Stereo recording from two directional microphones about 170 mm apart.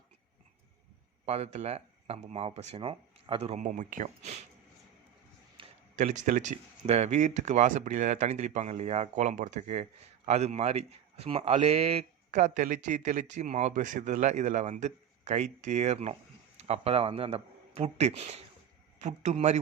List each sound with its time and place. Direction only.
1.2 s speech: 40° right (ahead or behind)
5.6 s a sound: 30° right (ahead or behind)
6.0 s a man's voice: 45° right (ahead or behind)